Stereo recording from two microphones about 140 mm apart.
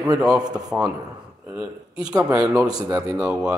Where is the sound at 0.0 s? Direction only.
5° right (ahead or behind).